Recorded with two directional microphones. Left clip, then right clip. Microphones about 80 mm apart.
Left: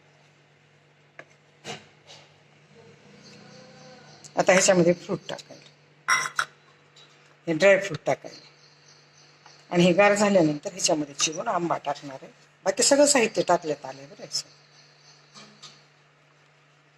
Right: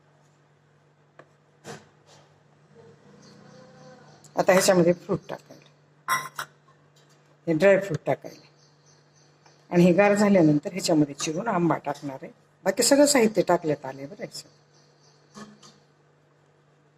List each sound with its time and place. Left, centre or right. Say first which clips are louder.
3.3 s a sound: left 2 dB; right
7.4 s speech: even; centre
9.6 s speech: even; centre
12.1 s speech: right 2 dB; centre